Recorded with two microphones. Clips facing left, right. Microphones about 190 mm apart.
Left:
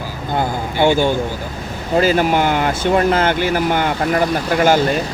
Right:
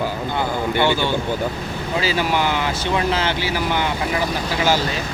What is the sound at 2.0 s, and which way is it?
Speech, 50° left (ahead or behind).